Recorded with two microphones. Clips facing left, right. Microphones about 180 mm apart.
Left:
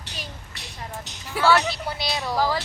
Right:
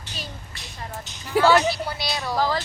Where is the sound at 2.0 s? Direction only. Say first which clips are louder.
Left 2 dB; 20° left (ahead or behind).